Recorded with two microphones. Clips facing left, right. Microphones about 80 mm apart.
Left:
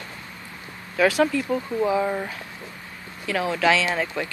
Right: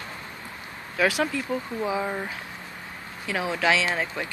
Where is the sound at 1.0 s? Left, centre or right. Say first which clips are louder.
Left 4 dB; centre.